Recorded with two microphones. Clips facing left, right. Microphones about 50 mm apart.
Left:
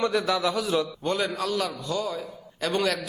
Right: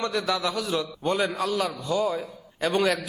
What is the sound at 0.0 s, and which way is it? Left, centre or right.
Speech, centre.